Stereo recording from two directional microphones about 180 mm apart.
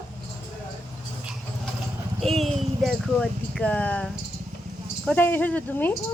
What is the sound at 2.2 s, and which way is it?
Speech, centre (ahead or behind).